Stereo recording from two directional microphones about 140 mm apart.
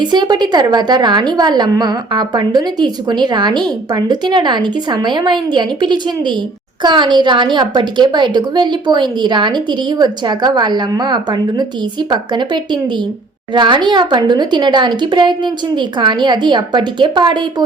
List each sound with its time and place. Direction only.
0.0 s a woman's voice: 30° right (ahead or behind)